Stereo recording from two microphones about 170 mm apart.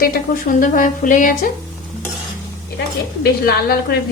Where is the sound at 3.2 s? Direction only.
65° left (ahead or behind).